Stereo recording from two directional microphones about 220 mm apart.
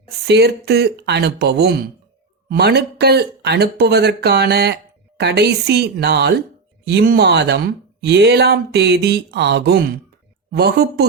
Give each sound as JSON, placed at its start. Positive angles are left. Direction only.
{"t": 0.3, "sound": "speech", "side_deg": -45}